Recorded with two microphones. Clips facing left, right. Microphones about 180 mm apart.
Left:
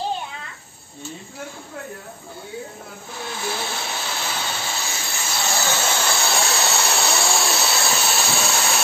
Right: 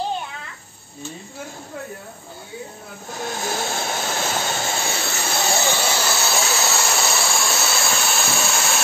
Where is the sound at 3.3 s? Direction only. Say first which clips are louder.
Right 2 dB; 45° right (ahead or behind).